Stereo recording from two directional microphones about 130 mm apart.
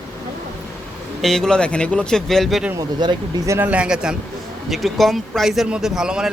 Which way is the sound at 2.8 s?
25° right (ahead or behind).